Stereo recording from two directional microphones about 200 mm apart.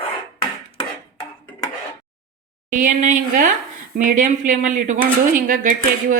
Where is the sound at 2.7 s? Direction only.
40° right (ahead or behind).